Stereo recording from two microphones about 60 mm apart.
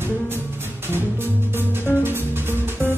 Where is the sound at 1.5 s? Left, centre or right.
Right.